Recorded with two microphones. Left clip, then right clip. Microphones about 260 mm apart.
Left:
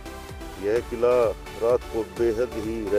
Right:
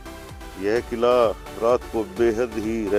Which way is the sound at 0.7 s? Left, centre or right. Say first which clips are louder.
Right 2 dB; right.